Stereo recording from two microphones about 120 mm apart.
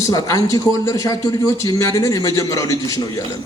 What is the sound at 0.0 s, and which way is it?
A man's voice, 30° left (ahead or behind).